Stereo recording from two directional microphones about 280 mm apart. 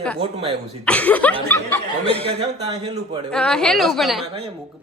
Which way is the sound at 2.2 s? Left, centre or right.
Centre.